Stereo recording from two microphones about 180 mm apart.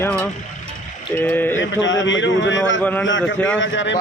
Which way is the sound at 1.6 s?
90° left.